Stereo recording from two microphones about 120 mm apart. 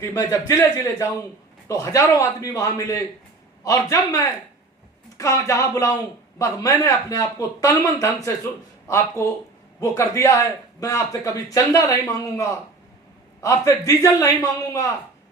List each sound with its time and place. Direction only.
0.0 s a man's voice: 30° left (ahead or behind)
9.8 s a man's voice: 25° left (ahead or behind)